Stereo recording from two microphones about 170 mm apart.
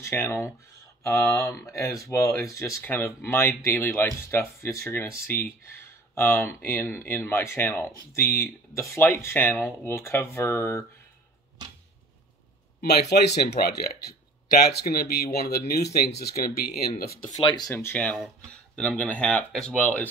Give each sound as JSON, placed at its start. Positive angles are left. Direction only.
{"t": 0.0, "sound": "speech", "side_deg": 15}
{"t": 12.8, "sound": "speech", "side_deg": 75}
{"t": 14.7, "sound": "speech", "side_deg": 65}
{"t": 17.4, "sound": "speech", "side_deg": 30}
{"t": 17.6, "sound": "speech", "side_deg": 10}